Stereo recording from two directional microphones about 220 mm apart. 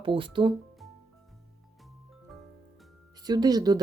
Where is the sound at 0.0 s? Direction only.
25° right (ahead or behind).